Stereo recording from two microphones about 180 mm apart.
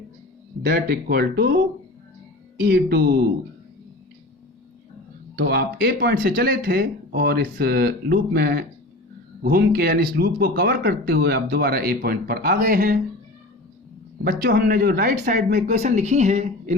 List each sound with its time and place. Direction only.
0.6 s speech: 60° right (ahead or behind)
2.6 s speech: 60° right (ahead or behind)
5.4 s speech: 60° right (ahead or behind)
14.3 s speech: 55° right (ahead or behind); by 16.7 s 40° right (ahead or behind)